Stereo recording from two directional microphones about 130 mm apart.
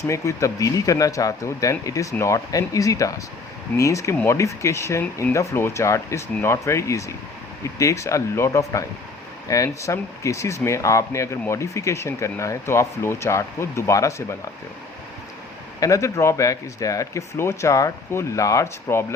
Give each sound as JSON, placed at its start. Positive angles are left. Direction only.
{"t": 0.1, "sound": "speech", "side_deg": 25}
{"t": 15.8, "sound": "speech", "side_deg": 25}